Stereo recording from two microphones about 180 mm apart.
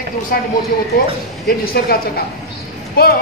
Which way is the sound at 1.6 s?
55° left (ahead or behind).